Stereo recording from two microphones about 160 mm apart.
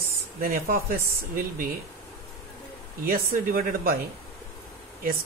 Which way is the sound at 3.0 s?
65° right (ahead or behind).